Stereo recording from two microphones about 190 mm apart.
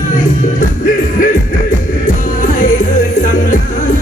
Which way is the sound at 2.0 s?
45° left (ahead or behind).